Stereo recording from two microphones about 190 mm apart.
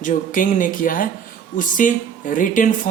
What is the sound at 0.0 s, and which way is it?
Speech, 45° left (ahead or behind).